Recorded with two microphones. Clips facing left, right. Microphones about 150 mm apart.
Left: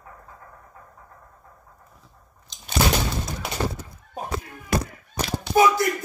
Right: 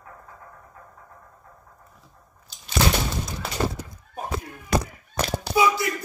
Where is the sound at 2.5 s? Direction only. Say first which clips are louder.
Left 3 dB; 5° right (ahead or behind).